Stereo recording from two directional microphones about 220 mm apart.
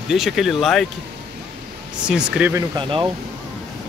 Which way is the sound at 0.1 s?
Centre (ahead or behind).